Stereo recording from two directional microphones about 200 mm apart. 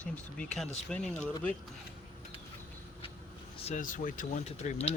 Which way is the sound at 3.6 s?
40° left (ahead or behind).